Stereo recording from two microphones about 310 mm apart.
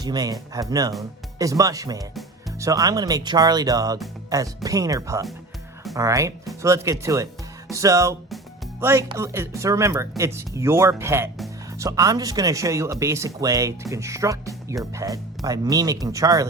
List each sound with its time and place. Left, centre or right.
0.0 s speech: centre
7.7 s music: centre
8.8 s speech: centre